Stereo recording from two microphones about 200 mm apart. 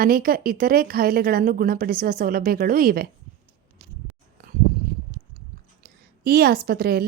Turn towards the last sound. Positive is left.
turn(degrees=-50)  # may be behind; listen again after turning